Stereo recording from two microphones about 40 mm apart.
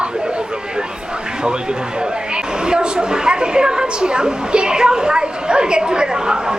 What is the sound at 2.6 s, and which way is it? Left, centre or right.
A woman's voice, right.